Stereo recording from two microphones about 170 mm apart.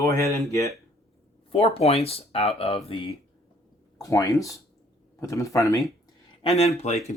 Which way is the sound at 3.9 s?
20° left (ahead or behind).